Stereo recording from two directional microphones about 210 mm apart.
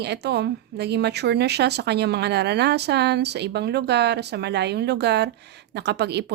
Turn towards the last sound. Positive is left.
turn(degrees=-50)  # may be behind; listen again after turning